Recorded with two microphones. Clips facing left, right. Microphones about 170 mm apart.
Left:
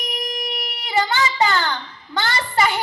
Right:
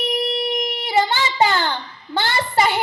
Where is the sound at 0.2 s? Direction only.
30° right (ahead or behind).